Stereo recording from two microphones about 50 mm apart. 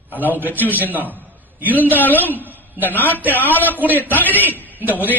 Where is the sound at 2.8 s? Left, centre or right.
Left.